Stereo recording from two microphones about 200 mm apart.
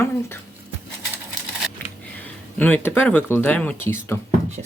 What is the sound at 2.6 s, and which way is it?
Speech, 10° left (ahead or behind).